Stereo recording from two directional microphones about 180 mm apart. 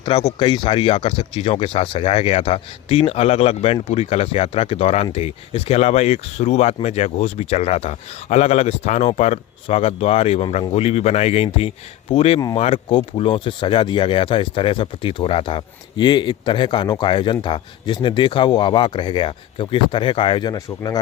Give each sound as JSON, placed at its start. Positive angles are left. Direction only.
{"t": 0.0, "sound": "speech", "side_deg": 35}